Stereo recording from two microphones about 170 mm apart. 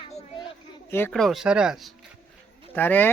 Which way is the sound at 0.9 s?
15° left (ahead or behind).